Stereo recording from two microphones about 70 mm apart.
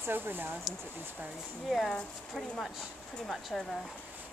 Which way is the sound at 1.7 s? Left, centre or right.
Centre.